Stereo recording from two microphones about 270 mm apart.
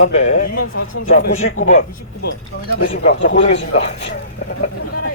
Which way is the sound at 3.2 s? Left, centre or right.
Left.